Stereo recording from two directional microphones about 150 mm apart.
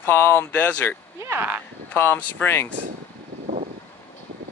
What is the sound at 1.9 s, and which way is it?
Speech, 15° left (ahead or behind).